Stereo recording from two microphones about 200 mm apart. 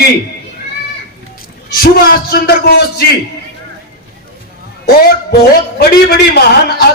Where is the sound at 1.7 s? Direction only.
50° left (ahead or behind).